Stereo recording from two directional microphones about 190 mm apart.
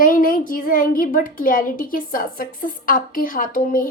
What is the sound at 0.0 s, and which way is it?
Speech, 50° left (ahead or behind).